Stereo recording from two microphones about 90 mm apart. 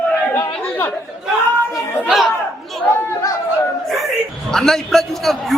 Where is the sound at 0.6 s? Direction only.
20° left (ahead or behind).